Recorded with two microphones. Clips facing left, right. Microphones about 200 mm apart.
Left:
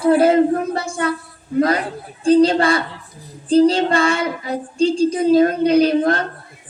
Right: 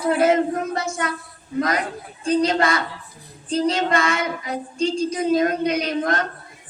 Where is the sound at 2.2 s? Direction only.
30° left (ahead or behind).